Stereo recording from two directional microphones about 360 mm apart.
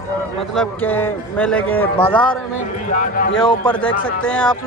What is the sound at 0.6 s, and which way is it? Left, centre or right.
A man's voice, centre.